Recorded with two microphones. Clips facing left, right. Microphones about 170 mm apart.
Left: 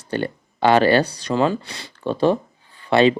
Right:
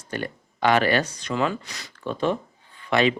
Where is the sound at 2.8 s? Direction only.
30° left (ahead or behind).